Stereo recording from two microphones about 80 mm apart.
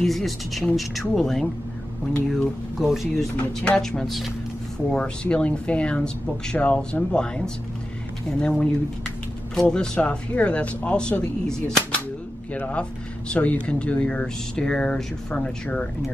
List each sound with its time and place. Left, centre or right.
0.0 s speech: centre
3.3 s speech: centre
3.8 s speech: centre
4.9 s speech: centre
12.5 s speech: centre